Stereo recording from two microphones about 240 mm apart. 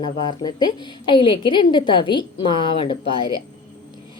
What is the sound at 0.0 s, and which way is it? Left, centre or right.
A woman's voice, centre.